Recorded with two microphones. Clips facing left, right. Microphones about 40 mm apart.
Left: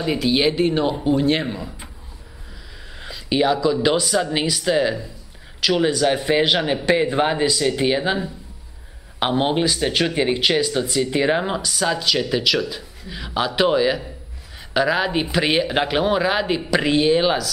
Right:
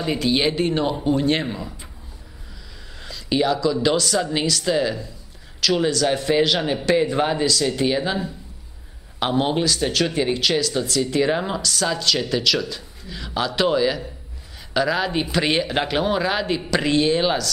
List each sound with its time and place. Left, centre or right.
0.0 s speech: centre
3.0 s a man's voice: centre